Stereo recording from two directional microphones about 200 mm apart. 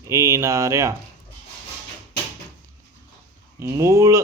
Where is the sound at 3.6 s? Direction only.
15° right (ahead or behind).